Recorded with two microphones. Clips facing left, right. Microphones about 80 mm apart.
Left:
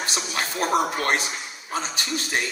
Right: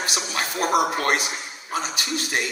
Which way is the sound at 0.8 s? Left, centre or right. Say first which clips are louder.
Right 2 dB; left.